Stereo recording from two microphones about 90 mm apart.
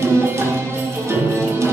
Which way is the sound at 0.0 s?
30° right (ahead or behind).